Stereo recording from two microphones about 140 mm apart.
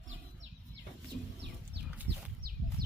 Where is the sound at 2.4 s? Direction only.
90° right.